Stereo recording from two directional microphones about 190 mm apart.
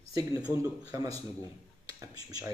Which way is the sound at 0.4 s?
10° right (ahead or behind).